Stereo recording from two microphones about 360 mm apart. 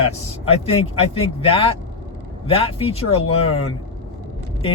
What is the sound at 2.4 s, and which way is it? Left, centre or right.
Speech, centre.